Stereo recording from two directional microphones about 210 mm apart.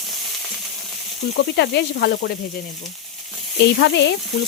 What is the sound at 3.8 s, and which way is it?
Speech, 55° left (ahead or behind).